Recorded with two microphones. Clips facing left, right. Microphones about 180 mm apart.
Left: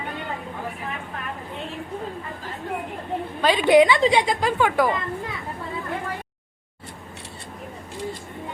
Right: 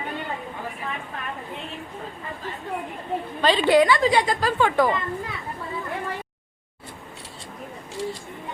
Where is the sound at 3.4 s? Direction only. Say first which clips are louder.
Left 2 dB; 10° left (ahead or behind).